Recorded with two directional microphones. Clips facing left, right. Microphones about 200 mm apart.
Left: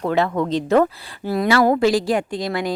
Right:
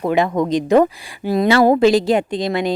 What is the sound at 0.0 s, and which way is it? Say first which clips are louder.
Speech: right 3 dB; 15° right (ahead or behind).